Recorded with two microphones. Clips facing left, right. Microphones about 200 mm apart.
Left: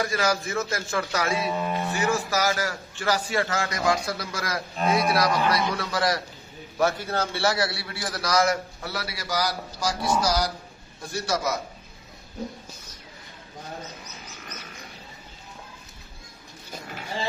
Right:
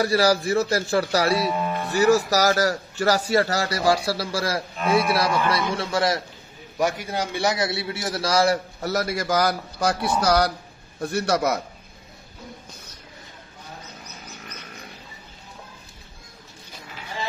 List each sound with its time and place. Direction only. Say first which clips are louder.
0.0 s a man's voice: right 6 dB; 35° right (ahead or behind)
6.8 s a man's voice: even; 15° right (ahead or behind); by 11.6 s 60° right (ahead or behind)